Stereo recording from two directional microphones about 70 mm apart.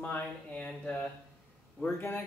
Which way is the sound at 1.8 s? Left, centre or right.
Left.